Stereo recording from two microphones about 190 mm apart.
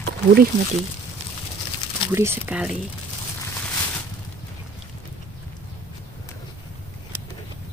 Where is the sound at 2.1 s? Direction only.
10° right (ahead or behind).